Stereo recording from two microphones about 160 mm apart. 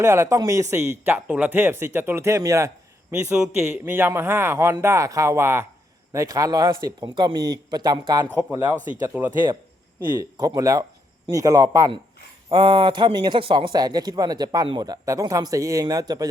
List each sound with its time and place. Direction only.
0.0 s speech: 20° right (ahead or behind)
3.1 s speech: 5° right (ahead or behind); by 8.4 s 25° right (ahead or behind)
9.1 s speech: 10° right (ahead or behind)
10.0 s speech: 20° right (ahead or behind)
12.5 s speech: 30° right (ahead or behind)